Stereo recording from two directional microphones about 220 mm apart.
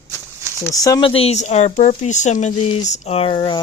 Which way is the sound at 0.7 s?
15° left (ahead or behind).